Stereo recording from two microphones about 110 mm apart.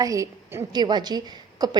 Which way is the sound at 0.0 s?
30° right (ahead or behind).